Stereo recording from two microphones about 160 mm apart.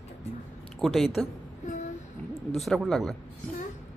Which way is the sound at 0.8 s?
Centre (ahead or behind).